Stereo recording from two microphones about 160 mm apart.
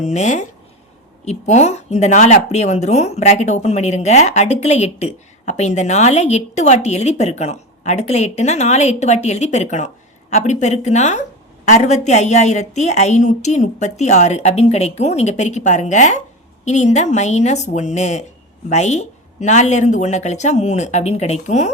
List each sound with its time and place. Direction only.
0.0 s speech: 45° left (ahead or behind)